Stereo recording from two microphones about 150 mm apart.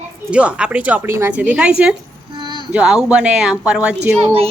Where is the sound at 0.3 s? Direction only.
5° right (ahead or behind).